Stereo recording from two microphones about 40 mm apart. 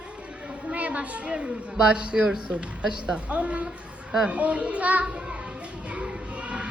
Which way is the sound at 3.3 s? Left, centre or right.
Right.